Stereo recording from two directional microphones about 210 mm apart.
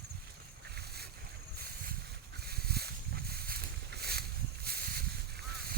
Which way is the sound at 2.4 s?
50° right (ahead or behind).